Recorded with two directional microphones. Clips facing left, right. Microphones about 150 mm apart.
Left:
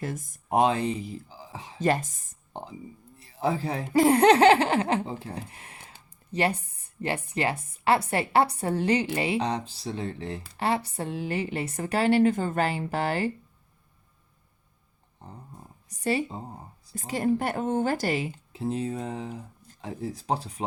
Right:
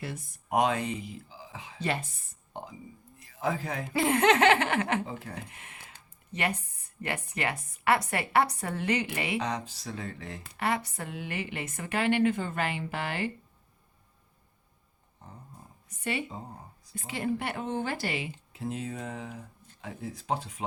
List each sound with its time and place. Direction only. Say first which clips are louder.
0.0 s speech: left 5 dB; 45° left (ahead or behind)
0.4 s a woman's voice: left 4 dB; 30° left (ahead or behind)
15.9 s a woman's voice: left 6 dB; 35° left (ahead or behind)